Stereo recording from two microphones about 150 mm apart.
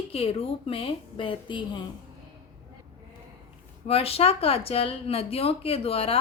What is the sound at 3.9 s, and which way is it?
Speech, 40° left (ahead or behind).